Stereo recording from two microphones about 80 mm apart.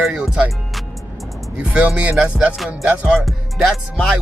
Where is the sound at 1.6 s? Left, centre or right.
Centre.